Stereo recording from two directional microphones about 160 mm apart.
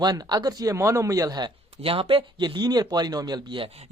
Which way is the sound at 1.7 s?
35° right (ahead or behind).